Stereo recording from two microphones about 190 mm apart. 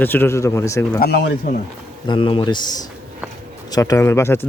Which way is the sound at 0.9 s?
60° left (ahead or behind).